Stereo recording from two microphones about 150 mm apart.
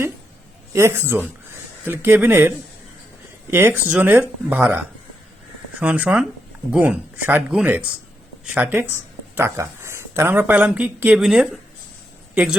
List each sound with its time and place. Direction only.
0.7 s speech: 20° right (ahead or behind)
3.5 s speech: 15° right (ahead or behind)